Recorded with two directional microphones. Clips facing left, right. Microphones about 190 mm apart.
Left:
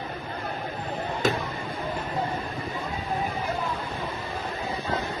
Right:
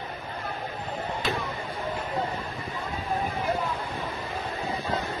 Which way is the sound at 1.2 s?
45° left (ahead or behind).